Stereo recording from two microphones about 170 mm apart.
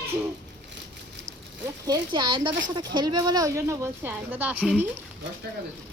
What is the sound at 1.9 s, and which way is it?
Speech, 25° right (ahead or behind).